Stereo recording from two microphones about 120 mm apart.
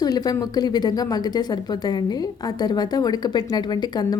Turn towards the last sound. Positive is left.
turn(degrees=35)  # may be behind; listen again after turning